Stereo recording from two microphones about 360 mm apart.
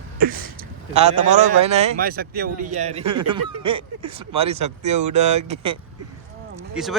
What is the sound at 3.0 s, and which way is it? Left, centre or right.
Speech, right.